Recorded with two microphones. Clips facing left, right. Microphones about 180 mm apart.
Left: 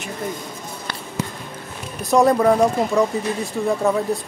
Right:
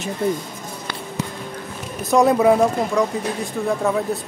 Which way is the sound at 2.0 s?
Centre (ahead or behind).